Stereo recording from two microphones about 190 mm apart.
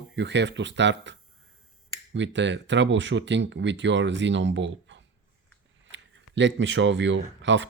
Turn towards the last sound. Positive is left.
turn(degrees=-70)  # may be behind; listen again after turning